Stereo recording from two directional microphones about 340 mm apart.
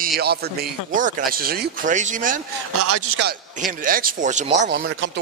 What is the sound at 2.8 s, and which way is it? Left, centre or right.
Speech, right.